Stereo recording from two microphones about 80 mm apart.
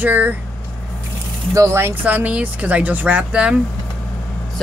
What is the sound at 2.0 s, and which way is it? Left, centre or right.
Speech, centre.